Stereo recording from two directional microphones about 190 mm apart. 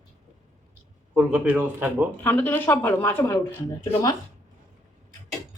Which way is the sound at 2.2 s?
10° left (ahead or behind).